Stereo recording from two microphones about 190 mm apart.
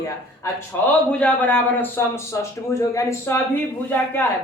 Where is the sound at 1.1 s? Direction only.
5° left (ahead or behind).